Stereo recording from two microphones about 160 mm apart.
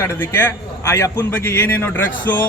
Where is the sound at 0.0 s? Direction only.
15° left (ahead or behind).